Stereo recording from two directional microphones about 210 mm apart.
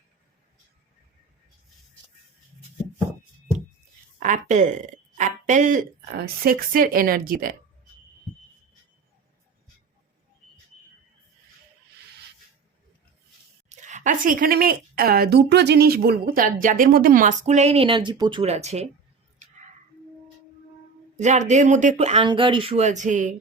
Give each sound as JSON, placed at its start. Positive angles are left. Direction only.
{"t": 4.2, "sound": "speech", "side_deg": -35}
{"t": 13.7, "sound": "speech", "side_deg": -35}
{"t": 21.2, "sound": "speech", "side_deg": -35}